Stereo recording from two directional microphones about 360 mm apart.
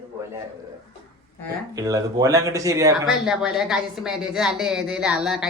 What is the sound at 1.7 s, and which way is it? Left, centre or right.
Speech, centre.